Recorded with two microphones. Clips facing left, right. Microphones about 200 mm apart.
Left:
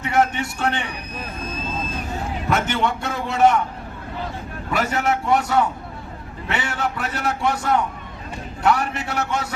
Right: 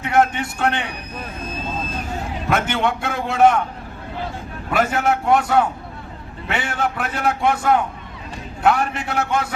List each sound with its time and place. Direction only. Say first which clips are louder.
0.1 s a man's voice: right 2 dB; 55° right (ahead or behind)
2.5 s a man's voice: right 1 dB; 55° right (ahead or behind)
4.7 s a man's voice: right 3 dB; 55° right (ahead or behind)